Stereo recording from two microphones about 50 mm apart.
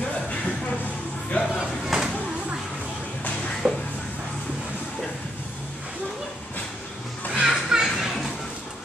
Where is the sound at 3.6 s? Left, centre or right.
Centre.